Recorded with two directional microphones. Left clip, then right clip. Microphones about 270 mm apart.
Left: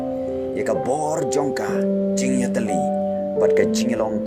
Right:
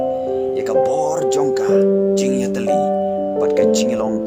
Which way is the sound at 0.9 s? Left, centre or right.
Centre.